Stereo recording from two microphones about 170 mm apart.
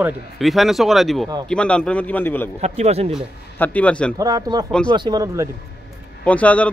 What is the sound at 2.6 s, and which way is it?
Speech, 40° right (ahead or behind).